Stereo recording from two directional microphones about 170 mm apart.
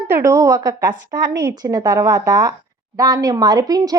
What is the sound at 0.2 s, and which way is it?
A woman's voice, 20° right (ahead or behind).